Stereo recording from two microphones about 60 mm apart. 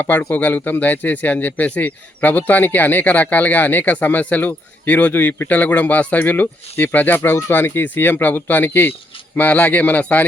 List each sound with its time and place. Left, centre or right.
0.0 s speech: left